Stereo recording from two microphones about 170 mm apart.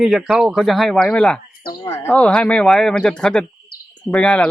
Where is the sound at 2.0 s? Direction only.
5° left (ahead or behind).